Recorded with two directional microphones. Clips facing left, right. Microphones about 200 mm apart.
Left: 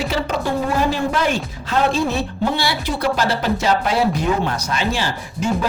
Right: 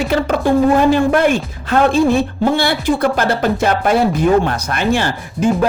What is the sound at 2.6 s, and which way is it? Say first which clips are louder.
Speech: right 7 dB; 55° right (ahead or behind).